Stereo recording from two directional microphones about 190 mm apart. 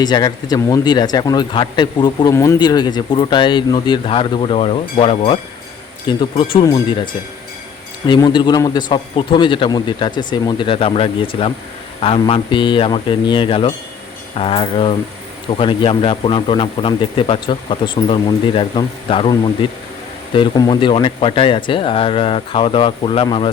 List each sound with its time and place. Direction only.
0.0 s speech: 20° left (ahead or behind)